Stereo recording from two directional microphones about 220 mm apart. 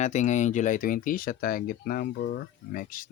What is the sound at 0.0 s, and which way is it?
Speech, 35° left (ahead or behind).